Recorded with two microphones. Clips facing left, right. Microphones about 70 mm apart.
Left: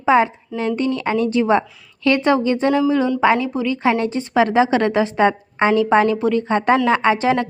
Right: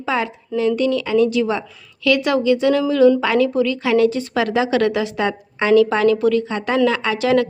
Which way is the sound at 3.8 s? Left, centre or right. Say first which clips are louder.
Right 2 dB; left.